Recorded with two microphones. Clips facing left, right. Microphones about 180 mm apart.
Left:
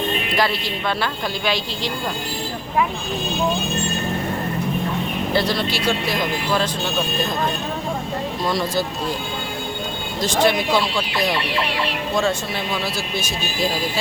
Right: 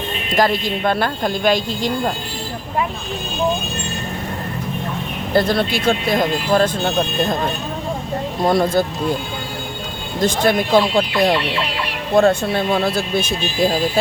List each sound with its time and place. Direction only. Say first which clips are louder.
0.3 s speech: right 8 dB; 45° right (ahead or behind)
5.3 s speech: right 6 dB; 50° right (ahead or behind)
8.4 s speech: right 7 dB; 55° right (ahead or behind)
10.2 s speech: right 2 dB; 50° right (ahead or behind)